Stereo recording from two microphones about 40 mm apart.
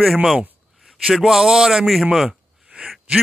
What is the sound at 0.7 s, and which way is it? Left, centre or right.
A man's voice, centre.